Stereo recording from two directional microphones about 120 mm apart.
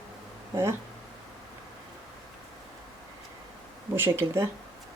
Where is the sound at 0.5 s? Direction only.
25° right (ahead or behind).